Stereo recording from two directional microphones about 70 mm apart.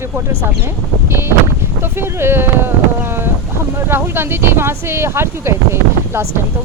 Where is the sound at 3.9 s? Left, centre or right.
Right.